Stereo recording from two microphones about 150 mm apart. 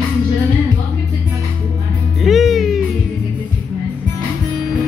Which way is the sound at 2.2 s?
Centre (ahead or behind).